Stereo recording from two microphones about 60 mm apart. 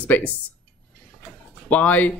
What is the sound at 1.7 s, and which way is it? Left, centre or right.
Speech, left.